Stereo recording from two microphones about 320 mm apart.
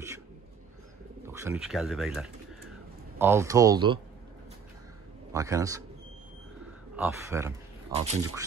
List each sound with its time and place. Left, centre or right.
1.2 s speech: centre
5.3 s speech: centre
7.0 s speech: centre